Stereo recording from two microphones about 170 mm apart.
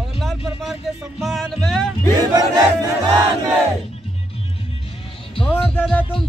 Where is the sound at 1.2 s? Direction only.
Centre (ahead or behind).